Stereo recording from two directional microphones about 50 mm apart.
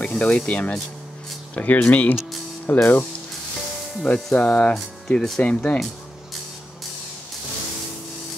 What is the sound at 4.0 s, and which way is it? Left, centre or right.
Speech, centre.